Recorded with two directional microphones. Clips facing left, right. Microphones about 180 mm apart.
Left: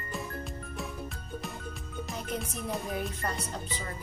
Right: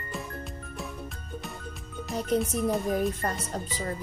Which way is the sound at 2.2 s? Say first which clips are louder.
Right 12 dB; 35° right (ahead or behind).